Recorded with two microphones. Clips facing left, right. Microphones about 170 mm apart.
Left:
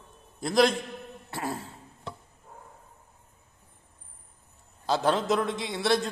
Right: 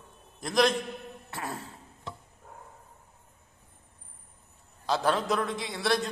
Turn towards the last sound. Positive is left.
turn(degrees=25)  # may be behind; listen again after turning